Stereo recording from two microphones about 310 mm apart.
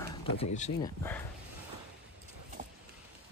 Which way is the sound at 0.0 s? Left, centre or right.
Centre.